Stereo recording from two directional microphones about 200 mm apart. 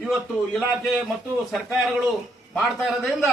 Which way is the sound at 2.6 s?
Centre (ahead or behind).